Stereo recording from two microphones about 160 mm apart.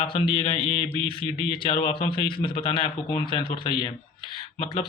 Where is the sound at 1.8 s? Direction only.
35° left (ahead or behind).